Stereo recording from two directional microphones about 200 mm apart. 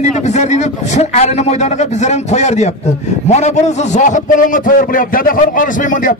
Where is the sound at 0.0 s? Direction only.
35° left (ahead or behind).